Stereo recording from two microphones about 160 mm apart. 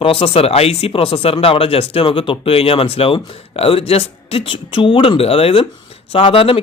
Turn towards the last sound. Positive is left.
turn(degrees=35)  # may be behind; listen again after turning